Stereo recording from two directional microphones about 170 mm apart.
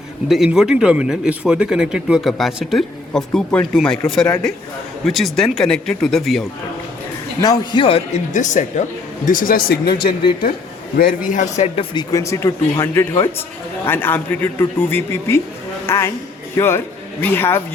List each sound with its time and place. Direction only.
0.3 s speech: 5° right (ahead or behind)
7.4 s a man's voice: 25° left (ahead or behind)
8.3 s a man's voice: 45° left (ahead or behind)
11.9 s a man's voice: 20° left (ahead or behind)